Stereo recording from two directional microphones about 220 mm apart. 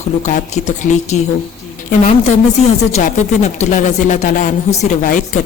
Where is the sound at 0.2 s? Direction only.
35° left (ahead or behind).